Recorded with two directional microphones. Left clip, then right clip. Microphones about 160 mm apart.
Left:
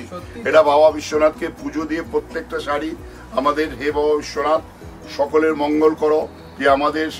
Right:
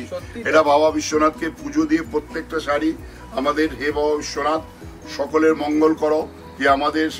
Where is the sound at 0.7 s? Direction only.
85° left.